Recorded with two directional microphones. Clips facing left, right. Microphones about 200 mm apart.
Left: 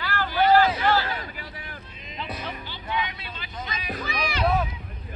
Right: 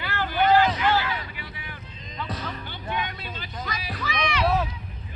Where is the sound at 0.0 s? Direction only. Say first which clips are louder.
Left 1 dB; 20° right (ahead or behind).